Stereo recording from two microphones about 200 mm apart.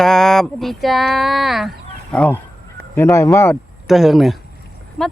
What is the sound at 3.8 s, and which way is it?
Speech, centre (ahead or behind).